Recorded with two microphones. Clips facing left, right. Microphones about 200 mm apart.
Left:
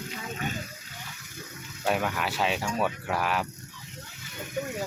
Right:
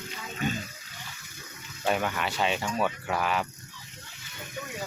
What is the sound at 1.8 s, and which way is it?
Speech, centre (ahead or behind).